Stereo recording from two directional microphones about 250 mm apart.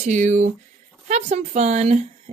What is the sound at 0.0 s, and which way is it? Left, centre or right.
Speech, right.